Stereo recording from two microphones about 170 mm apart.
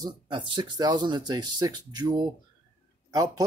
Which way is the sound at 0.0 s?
25° right (ahead or behind).